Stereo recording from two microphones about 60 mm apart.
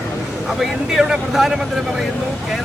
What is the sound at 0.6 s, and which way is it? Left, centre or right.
Speech, centre.